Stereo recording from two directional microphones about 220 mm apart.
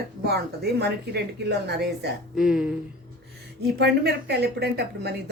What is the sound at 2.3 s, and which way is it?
Speech, centre (ahead or behind).